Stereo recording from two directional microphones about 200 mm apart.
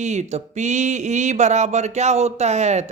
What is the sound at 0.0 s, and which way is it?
Speech, 35° right (ahead or behind).